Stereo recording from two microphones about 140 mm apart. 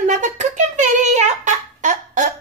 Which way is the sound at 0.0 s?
60° right (ahead or behind).